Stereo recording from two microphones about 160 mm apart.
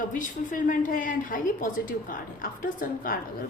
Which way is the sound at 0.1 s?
55° left (ahead or behind).